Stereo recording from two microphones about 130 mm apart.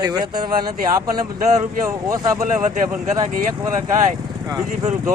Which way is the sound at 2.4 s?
80° right.